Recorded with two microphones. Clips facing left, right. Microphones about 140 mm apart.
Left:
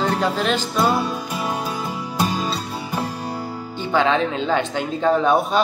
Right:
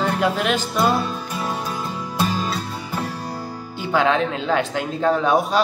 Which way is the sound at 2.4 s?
15° left (ahead or behind).